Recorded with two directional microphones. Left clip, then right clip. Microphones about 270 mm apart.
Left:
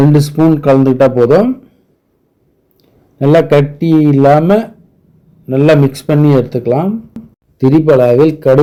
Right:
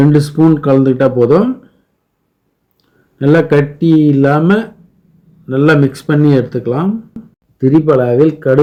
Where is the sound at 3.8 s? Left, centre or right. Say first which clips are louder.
Left 1 dB; centre.